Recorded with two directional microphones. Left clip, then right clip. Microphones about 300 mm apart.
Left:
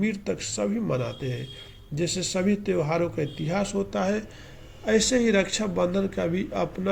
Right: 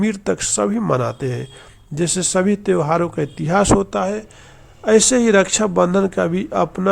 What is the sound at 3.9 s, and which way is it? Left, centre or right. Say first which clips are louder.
A man's voice: right 6 dB; centre.